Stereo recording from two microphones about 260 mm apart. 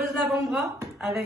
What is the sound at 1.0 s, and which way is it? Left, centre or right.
Beatboxing, centre.